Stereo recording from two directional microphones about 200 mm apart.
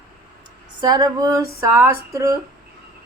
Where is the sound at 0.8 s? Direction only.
20° right (ahead or behind).